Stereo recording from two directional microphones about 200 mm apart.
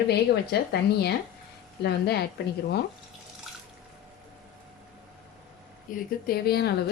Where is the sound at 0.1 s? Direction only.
55° left (ahead or behind).